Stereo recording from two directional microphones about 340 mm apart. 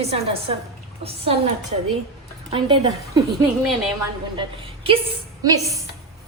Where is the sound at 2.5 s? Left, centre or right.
Centre.